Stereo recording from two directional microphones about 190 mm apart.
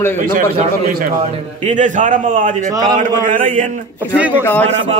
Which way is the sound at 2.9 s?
45° right (ahead or behind).